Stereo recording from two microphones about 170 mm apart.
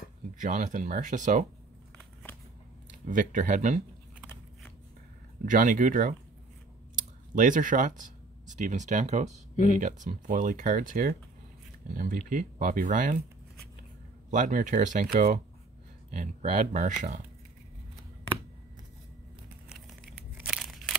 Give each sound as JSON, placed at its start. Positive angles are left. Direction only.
{"t": 0.4, "sound": "speech", "side_deg": -45}
{"t": 3.1, "sound": "speech", "side_deg": -50}
{"t": 5.4, "sound": "speech", "side_deg": -50}
{"t": 7.3, "sound": "speech", "side_deg": -50}
{"t": 14.3, "sound": "speech", "side_deg": -50}
{"t": 20.3, "sound": "a sound", "side_deg": -5}